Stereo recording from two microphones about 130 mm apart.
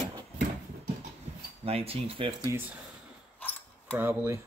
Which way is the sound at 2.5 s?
15° right (ahead or behind).